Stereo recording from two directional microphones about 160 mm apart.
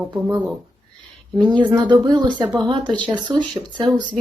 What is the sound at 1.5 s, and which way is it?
A woman's voice, 25° right (ahead or behind).